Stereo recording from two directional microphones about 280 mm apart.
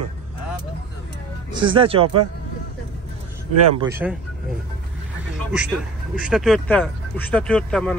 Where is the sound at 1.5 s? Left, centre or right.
Centre.